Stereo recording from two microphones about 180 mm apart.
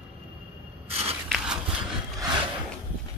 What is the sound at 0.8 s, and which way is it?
Walk, 35° right (ahead or behind).